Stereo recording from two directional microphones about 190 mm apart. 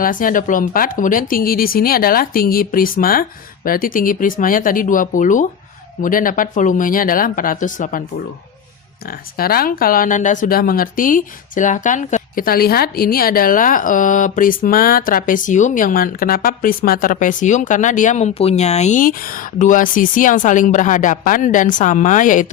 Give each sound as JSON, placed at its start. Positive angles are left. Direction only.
{"t": 0.0, "sound": "speech", "side_deg": 45}
{"t": 9.0, "sound": "speech", "side_deg": 50}